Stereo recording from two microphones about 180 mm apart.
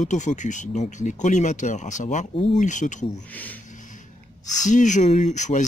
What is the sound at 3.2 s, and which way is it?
Speech, 10° left (ahead or behind).